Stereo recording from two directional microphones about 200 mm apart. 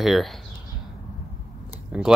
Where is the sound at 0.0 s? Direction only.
Centre (ahead or behind).